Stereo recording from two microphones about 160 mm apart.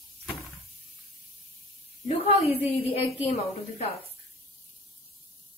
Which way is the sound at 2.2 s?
40° left (ahead or behind).